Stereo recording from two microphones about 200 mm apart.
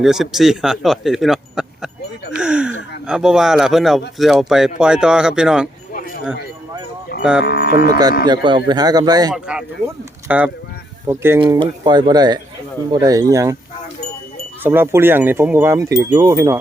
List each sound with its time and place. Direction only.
0.0 s speech: centre (ahead or behind)
2.3 s a sound: 5° right (ahead or behind)
3.1 s speech: 5° right (ahead or behind)
7.4 s livestock: 55° left (ahead or behind)
8.2 s speech: 20° right (ahead or behind)
9.3 s speech: 5° right (ahead or behind)
11.3 s speech: 25° right (ahead or behind)
14.6 s speech: 10° right (ahead or behind)